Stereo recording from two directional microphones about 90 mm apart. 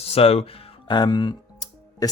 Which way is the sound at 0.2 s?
90° left.